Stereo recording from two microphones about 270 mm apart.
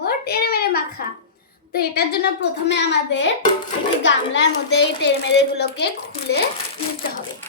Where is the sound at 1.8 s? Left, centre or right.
Left.